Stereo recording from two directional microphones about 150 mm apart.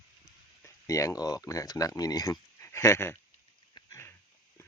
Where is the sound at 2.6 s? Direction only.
20° left (ahead or behind).